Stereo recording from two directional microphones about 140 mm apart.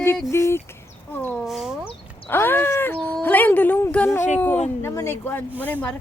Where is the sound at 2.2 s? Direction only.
15° left (ahead or behind).